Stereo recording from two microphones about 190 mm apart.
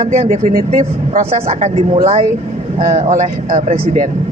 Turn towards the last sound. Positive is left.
turn(degrees=-40)  # may be behind; listen again after turning